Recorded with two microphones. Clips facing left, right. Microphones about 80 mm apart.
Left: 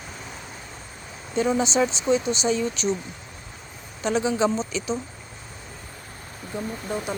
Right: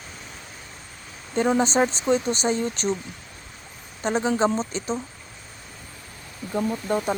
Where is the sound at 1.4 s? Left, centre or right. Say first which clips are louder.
Right 1 dB; right.